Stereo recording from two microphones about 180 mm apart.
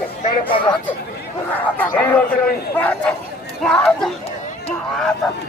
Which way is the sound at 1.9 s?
10° left (ahead or behind).